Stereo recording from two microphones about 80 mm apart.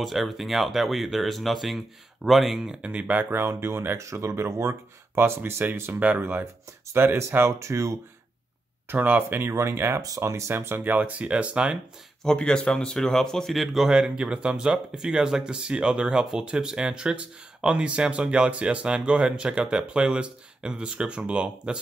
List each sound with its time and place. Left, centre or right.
0.0 s speech: centre; by 8.0 s right
8.8 s speech: right
10.8 s speech: right
12.2 s speech: centre